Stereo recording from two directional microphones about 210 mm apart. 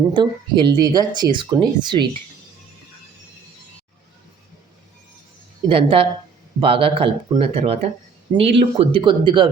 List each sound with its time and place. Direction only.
0.1 s speech: 20° right (ahead or behind)
5.6 s speech: 25° right (ahead or behind)